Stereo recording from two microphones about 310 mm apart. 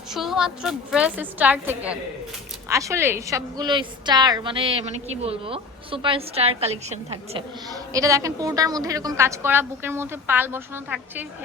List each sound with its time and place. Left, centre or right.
0.1 s a woman's voice: centre